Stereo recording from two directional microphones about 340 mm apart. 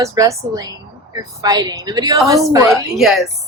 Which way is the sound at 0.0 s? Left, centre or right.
Centre.